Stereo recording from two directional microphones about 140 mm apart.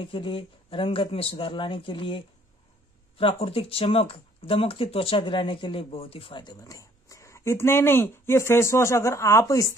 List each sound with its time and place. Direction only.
0.0 s speech: 40° left (ahead or behind); by 9.8 s 20° left (ahead or behind)